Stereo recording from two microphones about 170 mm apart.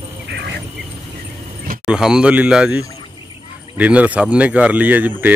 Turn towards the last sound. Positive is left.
turn(degrees=-10)  # may be behind; listen again after turning